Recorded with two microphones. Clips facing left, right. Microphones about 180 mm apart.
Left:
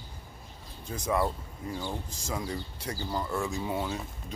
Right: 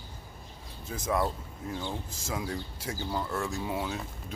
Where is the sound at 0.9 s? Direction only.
Centre (ahead or behind).